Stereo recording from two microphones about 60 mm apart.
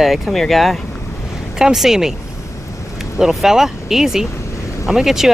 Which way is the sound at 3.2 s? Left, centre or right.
Centre.